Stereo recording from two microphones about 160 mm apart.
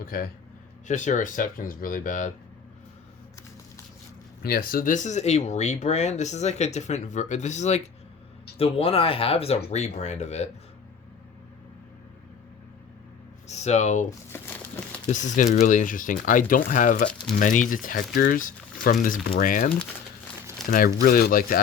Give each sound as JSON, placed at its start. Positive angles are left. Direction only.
{"t": 0.0, "sound": "speech", "side_deg": 60}
{"t": 0.9, "sound": "speech", "side_deg": 50}
{"t": 4.4, "sound": "speech", "side_deg": 70}
{"t": 13.5, "sound": "speech", "side_deg": 45}
{"t": 15.1, "sound": "speech", "side_deg": 50}